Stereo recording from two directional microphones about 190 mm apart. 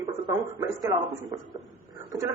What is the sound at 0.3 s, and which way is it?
A man's voice, 15° right (ahead or behind).